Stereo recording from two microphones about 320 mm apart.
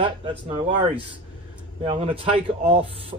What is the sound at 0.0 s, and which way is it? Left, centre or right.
A man's voice, centre.